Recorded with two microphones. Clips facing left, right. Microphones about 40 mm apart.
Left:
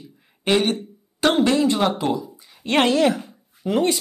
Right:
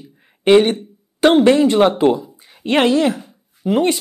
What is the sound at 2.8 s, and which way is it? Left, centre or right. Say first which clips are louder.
Speech: right 2 dB; centre.